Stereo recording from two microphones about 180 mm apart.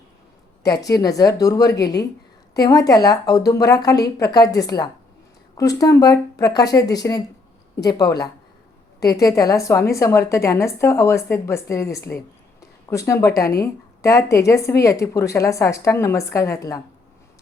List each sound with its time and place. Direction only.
0.6 s a woman's voice: 20° left (ahead or behind)